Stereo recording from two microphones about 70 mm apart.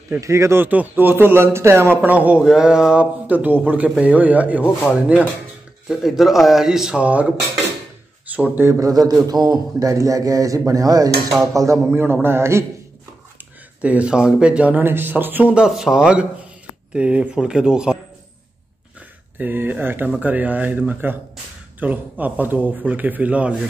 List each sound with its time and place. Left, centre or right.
0.2 s speech: right
0.7 s a man's voice: right
2.0 s a man's voice: right
2.4 s speech: centre
3.3 s a man's voice: right
5.9 s a man's voice: centre
7.0 s a man's voice: centre
8.7 s a man's voice: right
11.5 s speech: right
11.9 s a man's voice: right
13.7 s a man's voice: centre
15.5 s speech: centre
19.3 s a man's voice: right